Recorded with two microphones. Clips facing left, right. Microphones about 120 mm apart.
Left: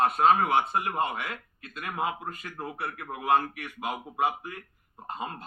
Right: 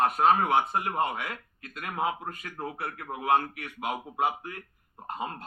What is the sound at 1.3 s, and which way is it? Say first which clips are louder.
Speech: even; 25° left (ahead or behind).